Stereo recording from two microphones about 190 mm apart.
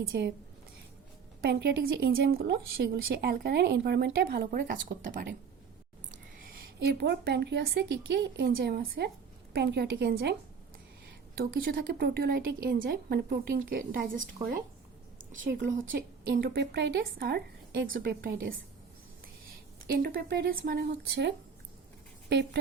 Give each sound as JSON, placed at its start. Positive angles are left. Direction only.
{"t": 0.0, "sound": "a woman's voice", "side_deg": -55}
{"t": 1.4, "sound": "a woman's voice", "side_deg": -60}
{"t": 6.7, "sound": "a woman's voice", "side_deg": -60}
{"t": 11.3, "sound": "a woman's voice", "side_deg": -55}
{"t": 15.4, "sound": "a woman's voice", "side_deg": -45}
{"t": 19.9, "sound": "a woman's voice", "side_deg": -50}